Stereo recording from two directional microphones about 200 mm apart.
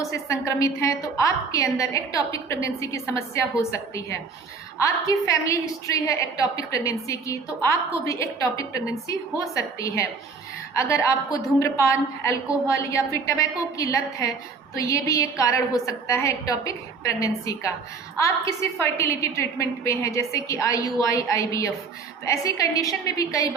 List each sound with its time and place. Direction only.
0.0 s a woman's voice: 15° left (ahead or behind)